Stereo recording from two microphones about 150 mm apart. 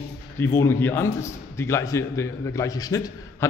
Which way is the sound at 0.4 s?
15° left (ahead or behind).